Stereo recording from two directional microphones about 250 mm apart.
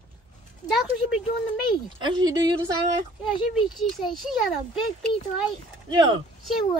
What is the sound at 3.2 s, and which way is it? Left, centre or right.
Speech, centre.